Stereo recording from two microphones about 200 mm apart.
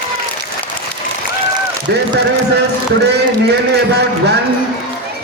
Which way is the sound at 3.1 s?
55° right (ahead or behind).